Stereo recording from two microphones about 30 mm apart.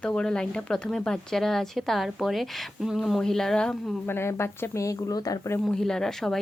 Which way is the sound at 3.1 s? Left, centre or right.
Centre.